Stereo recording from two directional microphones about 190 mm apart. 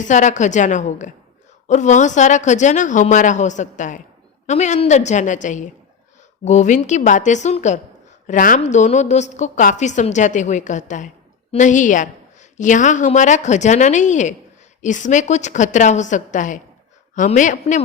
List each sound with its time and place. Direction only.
0.0 s a woman's voice: 40° left (ahead or behind)